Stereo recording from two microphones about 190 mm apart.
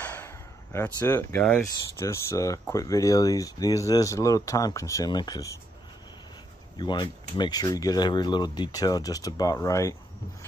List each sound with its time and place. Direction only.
0.0 s a sound: 10° left (ahead or behind)
0.9 s speech: 10° left (ahead or behind)
6.8 s speech: 25° left (ahead or behind)